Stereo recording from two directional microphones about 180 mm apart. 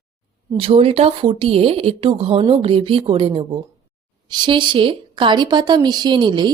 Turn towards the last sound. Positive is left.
turn(degrees=-25)  # may be behind; listen again after turning